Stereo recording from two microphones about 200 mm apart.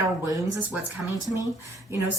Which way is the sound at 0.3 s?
15° right (ahead or behind).